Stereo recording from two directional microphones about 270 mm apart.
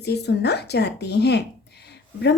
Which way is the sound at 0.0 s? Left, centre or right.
Left.